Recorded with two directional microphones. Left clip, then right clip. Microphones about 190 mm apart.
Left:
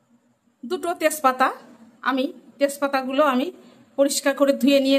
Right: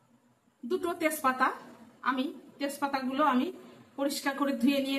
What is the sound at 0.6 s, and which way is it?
A woman's voice, 70° left (ahead or behind).